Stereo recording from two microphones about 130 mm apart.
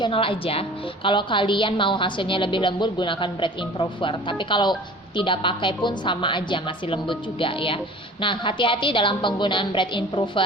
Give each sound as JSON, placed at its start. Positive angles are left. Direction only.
{"t": 0.0, "sound": "a woman's voice", "side_deg": 45}